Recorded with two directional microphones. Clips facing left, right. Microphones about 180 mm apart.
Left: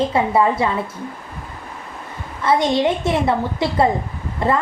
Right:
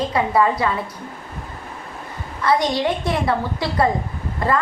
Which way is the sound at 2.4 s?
25° left (ahead or behind).